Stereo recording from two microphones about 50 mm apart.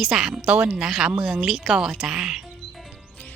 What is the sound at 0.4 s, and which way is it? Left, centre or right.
Speech, right.